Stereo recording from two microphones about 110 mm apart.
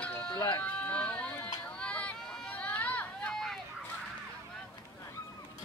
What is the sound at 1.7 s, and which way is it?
Run, 10° left (ahead or behind).